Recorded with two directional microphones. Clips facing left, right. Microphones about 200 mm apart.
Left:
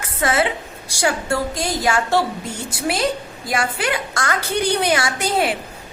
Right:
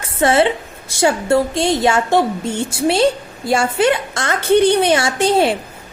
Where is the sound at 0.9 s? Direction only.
25° right (ahead or behind).